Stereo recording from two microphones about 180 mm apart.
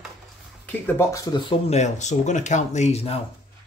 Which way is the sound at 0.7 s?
10° left (ahead or behind).